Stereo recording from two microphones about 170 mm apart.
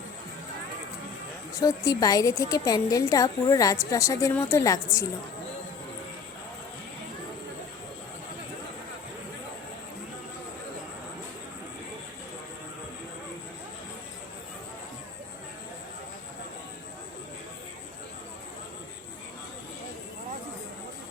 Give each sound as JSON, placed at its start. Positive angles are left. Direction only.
{"t": 1.5, "sound": "a woman's voice", "side_deg": 20}